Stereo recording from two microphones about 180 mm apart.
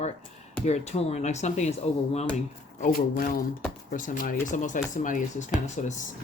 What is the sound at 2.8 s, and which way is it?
Speech, 55° left (ahead or behind).